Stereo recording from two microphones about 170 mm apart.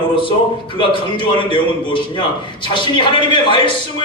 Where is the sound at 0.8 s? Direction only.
30° left (ahead or behind).